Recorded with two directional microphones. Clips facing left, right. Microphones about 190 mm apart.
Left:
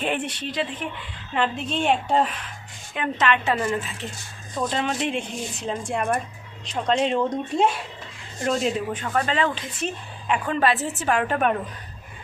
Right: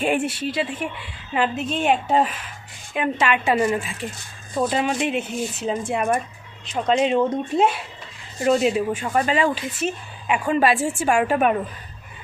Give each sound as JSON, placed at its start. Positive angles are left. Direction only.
{"t": 0.0, "sound": "speech", "side_deg": -10}